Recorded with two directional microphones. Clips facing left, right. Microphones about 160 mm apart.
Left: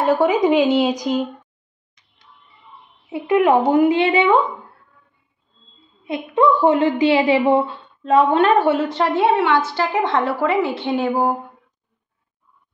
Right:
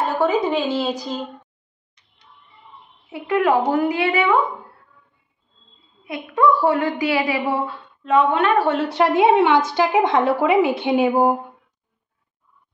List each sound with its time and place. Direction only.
0.1 s a woman's voice: 15° left (ahead or behind)
3.1 s a woman's voice: 20° left (ahead or behind)
6.0 s a woman's voice: 25° left (ahead or behind)
8.5 s a woman's voice: 10° left (ahead or behind)
8.8 s a woman's voice: 10° right (ahead or behind)